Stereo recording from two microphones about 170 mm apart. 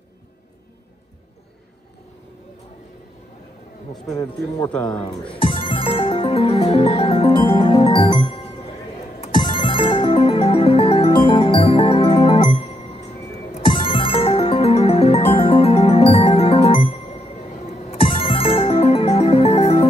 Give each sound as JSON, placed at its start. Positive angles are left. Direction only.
{"t": 4.1, "sound": "speech", "side_deg": 20}
{"t": 4.6, "sound": "speech", "side_deg": 5}
{"t": 5.3, "sound": "music", "side_deg": 30}
{"t": 12.6, "sound": "music", "side_deg": 40}
{"t": 13.5, "sound": "music", "side_deg": 30}